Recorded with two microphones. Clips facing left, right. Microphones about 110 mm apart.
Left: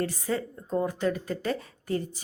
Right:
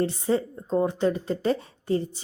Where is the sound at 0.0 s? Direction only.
25° right (ahead or behind).